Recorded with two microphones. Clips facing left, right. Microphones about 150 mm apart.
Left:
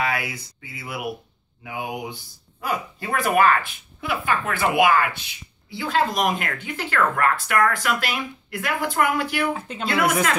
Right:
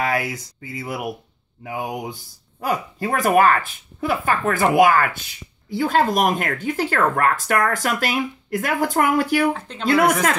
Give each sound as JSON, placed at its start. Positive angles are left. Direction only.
{"t": 0.0, "sound": "speech", "side_deg": -45}
{"t": 9.5, "sound": "speech", "side_deg": 10}